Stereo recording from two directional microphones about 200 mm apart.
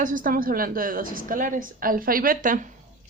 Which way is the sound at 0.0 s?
40° right (ahead or behind).